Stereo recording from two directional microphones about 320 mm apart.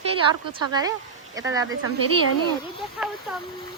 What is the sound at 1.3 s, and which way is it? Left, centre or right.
Speech, centre.